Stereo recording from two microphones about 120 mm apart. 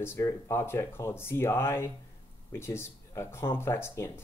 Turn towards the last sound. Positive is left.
turn(degrees=20)  # may be behind; listen again after turning